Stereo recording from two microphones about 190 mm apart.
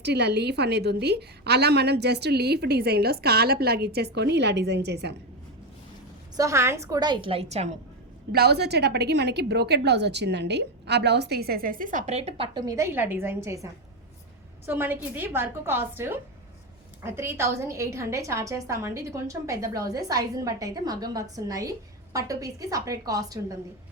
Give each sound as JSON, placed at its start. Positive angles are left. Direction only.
{"t": 0.0, "sound": "a woman's voice", "side_deg": -60}
{"t": 6.3, "sound": "a woman's voice", "side_deg": -15}
{"t": 8.3, "sound": "a woman's voice", "side_deg": -55}
{"t": 12.5, "sound": "a woman's voice", "side_deg": -15}
{"t": 14.7, "sound": "a woman's voice", "side_deg": -10}